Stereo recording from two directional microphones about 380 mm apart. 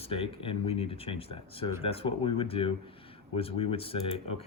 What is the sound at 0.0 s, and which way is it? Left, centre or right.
Speech, centre.